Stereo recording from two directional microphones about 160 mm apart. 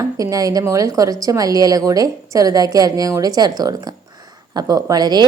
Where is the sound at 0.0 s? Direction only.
20° right (ahead or behind).